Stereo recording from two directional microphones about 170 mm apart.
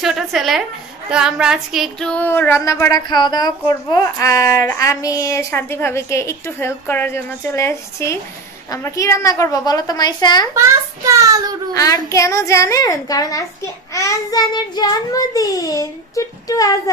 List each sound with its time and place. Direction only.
0.0 s a woman's voice: centre (ahead or behind)
1.1 s music: 5° right (ahead or behind); by 8.2 s 15° left (ahead or behind)
8.6 s child singing: 15° left (ahead or behind)
10.5 s a child's voice: 15° right (ahead or behind)
11.7 s child singing: 20° left (ahead or behind)